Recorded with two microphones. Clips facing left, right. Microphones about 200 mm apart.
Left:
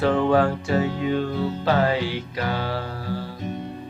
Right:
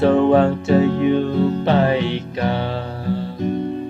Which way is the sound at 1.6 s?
25° right (ahead or behind).